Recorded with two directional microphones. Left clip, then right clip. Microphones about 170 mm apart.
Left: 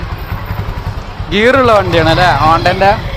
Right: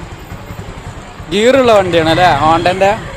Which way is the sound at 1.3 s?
20° right (ahead or behind).